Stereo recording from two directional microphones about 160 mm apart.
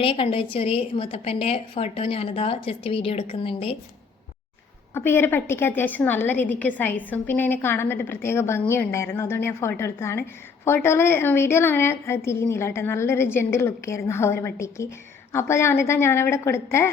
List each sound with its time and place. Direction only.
0.0 s a woman's voice: 35° left (ahead or behind)
4.9 s a woman's voice: 15° left (ahead or behind)